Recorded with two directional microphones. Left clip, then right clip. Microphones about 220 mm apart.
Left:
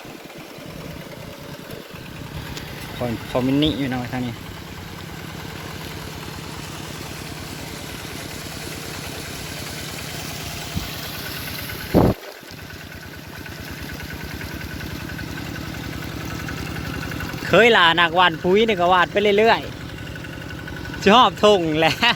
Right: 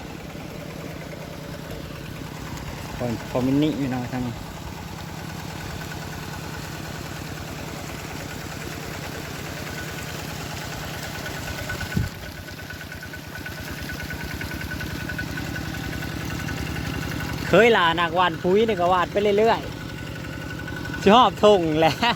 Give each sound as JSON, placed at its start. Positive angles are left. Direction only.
{"t": 3.0, "sound": "speech", "side_deg": 5}
{"t": 17.5, "sound": "speech", "side_deg": 5}
{"t": 21.0, "sound": "speech", "side_deg": 0}